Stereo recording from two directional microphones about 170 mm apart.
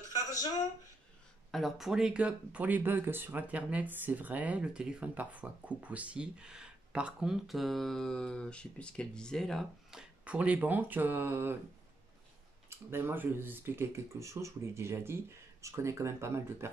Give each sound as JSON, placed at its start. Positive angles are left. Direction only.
{"t": 0.1, "sound": "a sound", "side_deg": 20}
{"t": 1.5, "sound": "speech", "side_deg": 0}
{"t": 12.6, "sound": "speech", "side_deg": -15}